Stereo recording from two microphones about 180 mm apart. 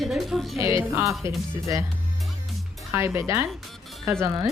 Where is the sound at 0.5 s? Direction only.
15° right (ahead or behind).